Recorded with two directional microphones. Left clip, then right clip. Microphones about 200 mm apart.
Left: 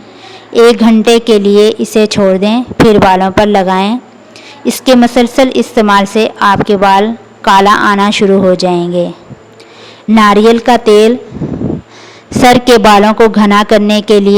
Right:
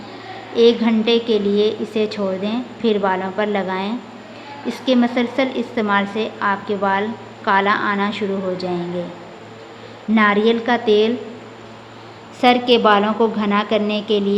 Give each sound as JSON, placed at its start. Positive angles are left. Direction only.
{"t": 0.5, "sound": "speech", "side_deg": 50}
{"t": 10.2, "sound": "speech", "side_deg": 55}
{"t": 12.4, "sound": "speech", "side_deg": 50}